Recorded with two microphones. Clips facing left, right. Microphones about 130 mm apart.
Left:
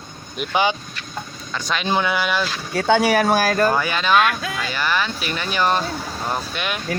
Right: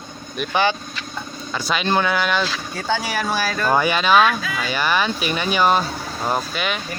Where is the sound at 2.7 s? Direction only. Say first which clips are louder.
Left 7 dB; 65° left (ahead or behind); by 3.6 s 50° left (ahead or behind).